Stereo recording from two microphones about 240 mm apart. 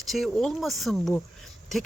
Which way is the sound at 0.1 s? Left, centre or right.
Centre.